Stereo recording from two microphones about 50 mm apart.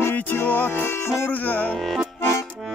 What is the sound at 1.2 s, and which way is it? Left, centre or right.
Music, left.